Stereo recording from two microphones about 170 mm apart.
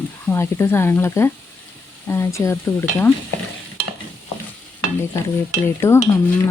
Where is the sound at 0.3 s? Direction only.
15° left (ahead or behind).